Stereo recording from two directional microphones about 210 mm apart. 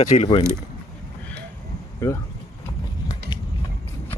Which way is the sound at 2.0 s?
10° left (ahead or behind).